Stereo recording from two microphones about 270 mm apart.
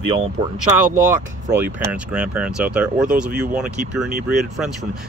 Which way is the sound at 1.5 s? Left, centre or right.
Centre.